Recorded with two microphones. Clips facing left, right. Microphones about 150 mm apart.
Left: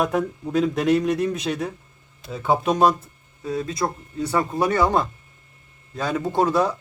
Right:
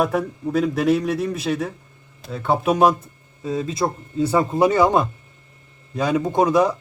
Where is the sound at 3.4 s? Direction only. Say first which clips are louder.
Right 2 dB; 25° right (ahead or behind).